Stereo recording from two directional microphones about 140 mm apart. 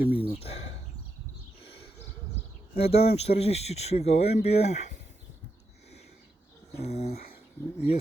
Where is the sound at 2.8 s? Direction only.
45° left (ahead or behind).